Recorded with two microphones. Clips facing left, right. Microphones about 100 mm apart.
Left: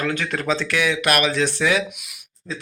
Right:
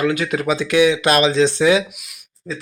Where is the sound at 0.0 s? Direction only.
10° right (ahead or behind).